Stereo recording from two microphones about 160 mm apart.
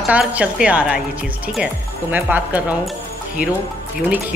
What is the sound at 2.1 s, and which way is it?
Speech, 10° right (ahead or behind).